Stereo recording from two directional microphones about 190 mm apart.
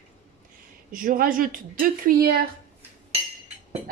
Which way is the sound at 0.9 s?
45° right (ahead or behind).